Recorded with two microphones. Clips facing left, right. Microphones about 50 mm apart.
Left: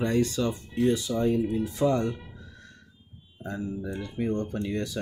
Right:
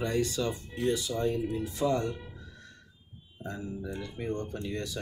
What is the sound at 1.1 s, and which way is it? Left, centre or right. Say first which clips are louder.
Speech: left 4 dB; left.